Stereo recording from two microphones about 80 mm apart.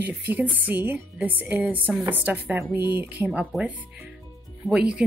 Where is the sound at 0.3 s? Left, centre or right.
Right.